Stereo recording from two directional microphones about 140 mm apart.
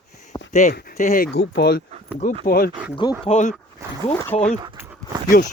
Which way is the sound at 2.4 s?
90° left.